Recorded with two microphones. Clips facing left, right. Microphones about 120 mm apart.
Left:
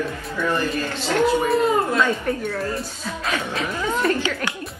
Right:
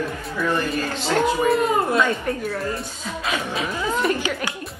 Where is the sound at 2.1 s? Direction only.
Centre (ahead or behind).